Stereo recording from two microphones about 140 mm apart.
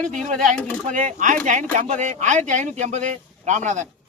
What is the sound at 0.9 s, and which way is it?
Speech, 65° right (ahead or behind).